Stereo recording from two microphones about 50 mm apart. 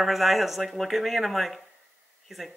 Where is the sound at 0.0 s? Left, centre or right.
Centre.